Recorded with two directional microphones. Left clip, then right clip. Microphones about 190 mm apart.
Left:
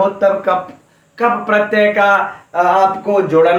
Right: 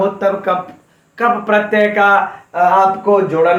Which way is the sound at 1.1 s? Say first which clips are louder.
Even; 30° right (ahead or behind).